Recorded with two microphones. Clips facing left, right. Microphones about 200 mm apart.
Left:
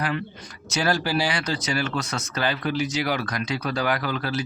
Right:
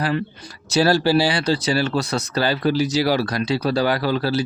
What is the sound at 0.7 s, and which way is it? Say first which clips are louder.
Speech: right 7 dB; 30° right (ahead or behind).